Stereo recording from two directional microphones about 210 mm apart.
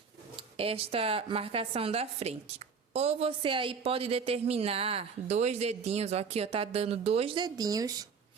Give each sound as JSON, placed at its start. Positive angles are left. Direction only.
{"t": 0.3, "sound": "speech", "side_deg": -25}